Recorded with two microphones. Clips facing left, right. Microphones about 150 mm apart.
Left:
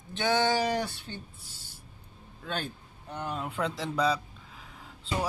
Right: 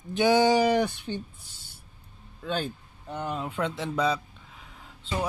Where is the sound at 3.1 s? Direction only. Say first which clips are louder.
Right 3 dB; 5° right (ahead or behind).